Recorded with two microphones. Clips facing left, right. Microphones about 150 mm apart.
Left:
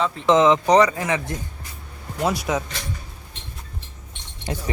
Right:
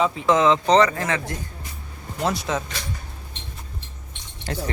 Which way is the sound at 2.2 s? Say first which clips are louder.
Left 2 dB; 10° left (ahead or behind).